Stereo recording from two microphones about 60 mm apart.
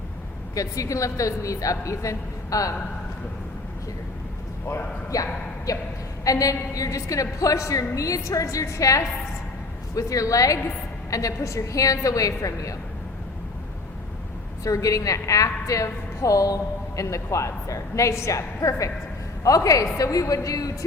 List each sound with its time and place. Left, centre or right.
0.5 s a woman's voice: left
5.1 s a woman's voice: left
14.6 s a woman's voice: left